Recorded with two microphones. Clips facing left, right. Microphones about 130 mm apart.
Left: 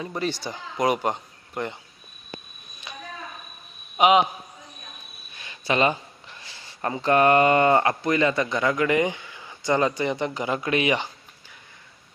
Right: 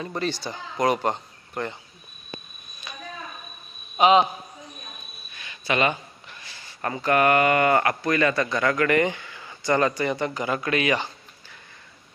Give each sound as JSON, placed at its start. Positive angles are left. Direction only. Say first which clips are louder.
{"t": 0.0, "sound": "speech", "louder": "even", "side_deg": 10}
{"t": 2.9, "sound": "a sound", "louder": "left 1 dB", "side_deg": 25}
{"t": 3.9, "sound": "a man's voice", "louder": "right 1 dB", "side_deg": 15}
{"t": 5.4, "sound": "speech", "louder": "left 1 dB", "side_deg": 30}